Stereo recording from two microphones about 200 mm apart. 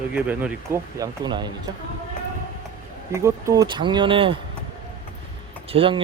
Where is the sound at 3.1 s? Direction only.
15° right (ahead or behind).